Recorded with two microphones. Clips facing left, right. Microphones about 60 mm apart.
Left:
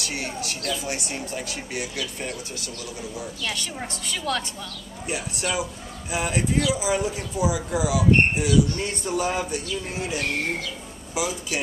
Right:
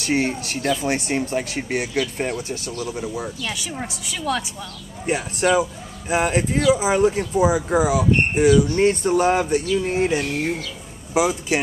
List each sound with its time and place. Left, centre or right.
0.0 s speech: right
3.4 s a woman's voice: centre
5.0 s speech: right
11.2 s speech: right